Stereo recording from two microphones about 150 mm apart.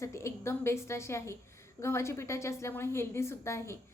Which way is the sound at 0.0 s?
20° left (ahead or behind).